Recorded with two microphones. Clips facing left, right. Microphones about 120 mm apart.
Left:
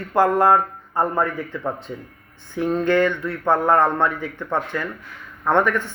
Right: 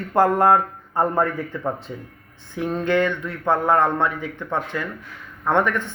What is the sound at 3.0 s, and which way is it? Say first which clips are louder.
Speech: left 2 dB; centre (ahead or behind).